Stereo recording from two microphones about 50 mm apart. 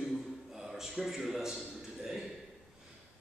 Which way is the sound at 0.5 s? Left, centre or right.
Centre.